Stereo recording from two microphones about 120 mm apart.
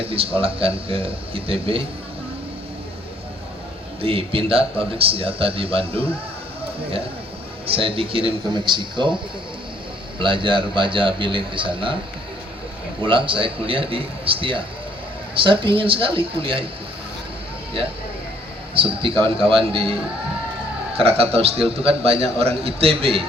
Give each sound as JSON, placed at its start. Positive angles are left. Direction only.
{"t": 0.0, "sound": "a man's voice", "side_deg": -50}
{"t": 4.0, "sound": "a man's voice", "side_deg": -50}
{"t": 7.7, "sound": "a man's voice", "side_deg": -50}
{"t": 10.2, "sound": "a man's voice", "side_deg": -45}
{"t": 13.1, "sound": "a man's voice", "side_deg": -45}
{"t": 18.7, "sound": "a man's voice", "side_deg": -50}